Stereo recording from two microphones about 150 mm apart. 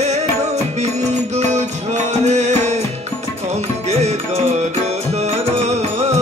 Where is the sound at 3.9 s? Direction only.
45° right (ahead or behind).